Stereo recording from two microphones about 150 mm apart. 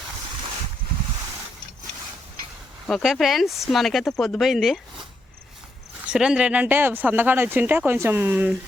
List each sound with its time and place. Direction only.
2.8 s speech: centre (ahead or behind)
6.1 s speech: 5° right (ahead or behind)